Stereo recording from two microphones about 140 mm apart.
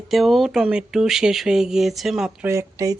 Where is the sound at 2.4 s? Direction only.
20° right (ahead or behind).